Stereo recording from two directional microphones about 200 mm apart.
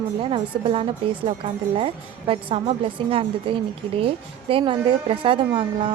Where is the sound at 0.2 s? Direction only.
25° right (ahead or behind).